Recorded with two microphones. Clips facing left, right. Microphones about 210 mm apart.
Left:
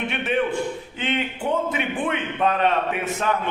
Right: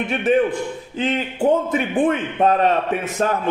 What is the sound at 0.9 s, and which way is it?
A man's voice, 35° right (ahead or behind).